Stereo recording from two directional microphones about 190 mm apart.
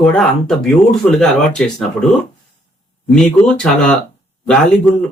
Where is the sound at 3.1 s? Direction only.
5° left (ahead or behind).